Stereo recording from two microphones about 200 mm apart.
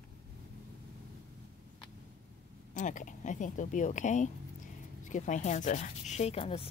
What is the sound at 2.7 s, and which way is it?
Speech, 40° left (ahead or behind).